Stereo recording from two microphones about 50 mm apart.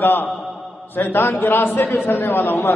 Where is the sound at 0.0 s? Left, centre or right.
Left.